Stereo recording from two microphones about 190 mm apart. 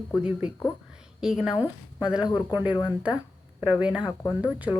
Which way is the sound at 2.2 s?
20° left (ahead or behind).